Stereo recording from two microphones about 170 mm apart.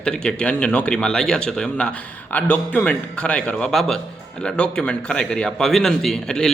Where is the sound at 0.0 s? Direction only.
5° left (ahead or behind).